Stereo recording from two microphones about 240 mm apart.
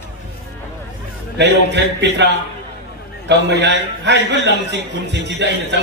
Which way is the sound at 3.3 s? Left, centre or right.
Right.